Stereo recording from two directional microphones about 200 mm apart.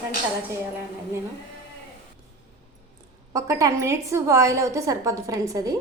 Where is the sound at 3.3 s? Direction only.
15° right (ahead or behind).